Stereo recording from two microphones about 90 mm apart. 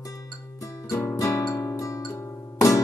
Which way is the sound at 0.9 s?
30° left (ahead or behind).